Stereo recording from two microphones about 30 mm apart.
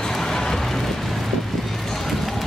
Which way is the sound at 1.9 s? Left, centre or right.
Centre.